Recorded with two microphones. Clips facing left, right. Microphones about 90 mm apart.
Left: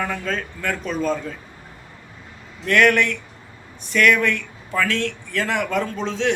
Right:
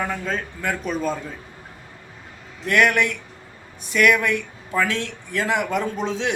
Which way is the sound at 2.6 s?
20° right (ahead or behind).